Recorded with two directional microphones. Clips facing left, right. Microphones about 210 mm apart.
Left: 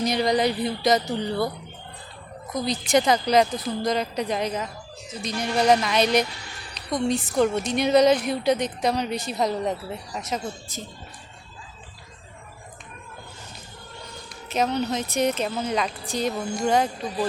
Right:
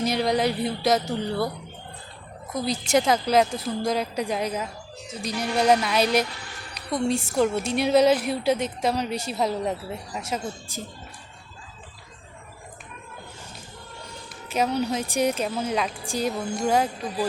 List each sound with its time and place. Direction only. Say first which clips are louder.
0.0 s a woman's voice: left 1 dB; 5° right (ahead or behind)
2.5 s a woman's voice: left 1 dB; 5° right (ahead or behind)
7.3 s a woman's voice: left 1 dB; 5° right (ahead or behind)
14.5 s a woman's voice: even; 10° right (ahead or behind)